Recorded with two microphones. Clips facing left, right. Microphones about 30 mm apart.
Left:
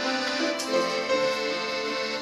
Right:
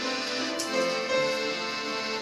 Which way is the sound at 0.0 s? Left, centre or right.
Centre.